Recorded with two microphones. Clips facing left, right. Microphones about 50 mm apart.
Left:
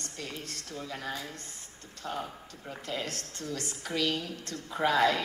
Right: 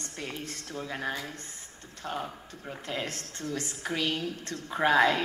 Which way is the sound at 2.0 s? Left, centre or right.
Right.